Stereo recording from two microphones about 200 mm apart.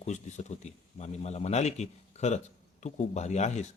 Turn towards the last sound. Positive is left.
turn(degrees=35)  # may be behind; listen again after turning